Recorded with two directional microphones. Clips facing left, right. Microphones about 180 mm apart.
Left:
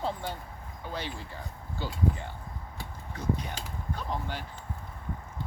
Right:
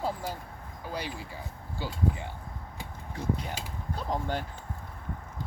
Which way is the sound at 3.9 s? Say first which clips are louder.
Right 5 dB; 45° right (ahead or behind).